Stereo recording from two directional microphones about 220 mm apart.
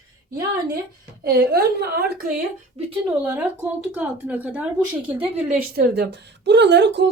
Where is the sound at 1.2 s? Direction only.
45° right (ahead or behind).